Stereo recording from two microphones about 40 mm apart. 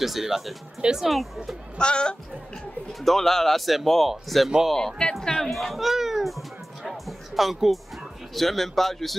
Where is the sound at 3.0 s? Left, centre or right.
Centre.